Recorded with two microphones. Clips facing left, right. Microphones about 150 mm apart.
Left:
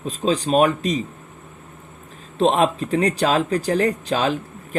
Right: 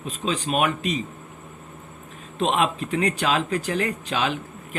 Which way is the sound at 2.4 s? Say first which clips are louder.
Left 5 dB; 35° left (ahead or behind).